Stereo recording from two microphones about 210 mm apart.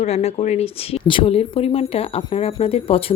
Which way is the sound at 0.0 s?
30° left (ahead or behind).